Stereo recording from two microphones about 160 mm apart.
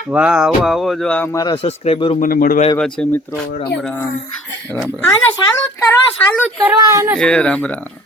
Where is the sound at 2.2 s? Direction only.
60° left (ahead or behind).